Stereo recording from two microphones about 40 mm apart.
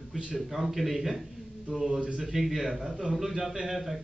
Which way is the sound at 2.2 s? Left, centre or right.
Centre.